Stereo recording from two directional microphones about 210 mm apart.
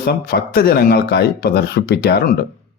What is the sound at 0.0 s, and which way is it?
A man's voice, 50° left (ahead or behind).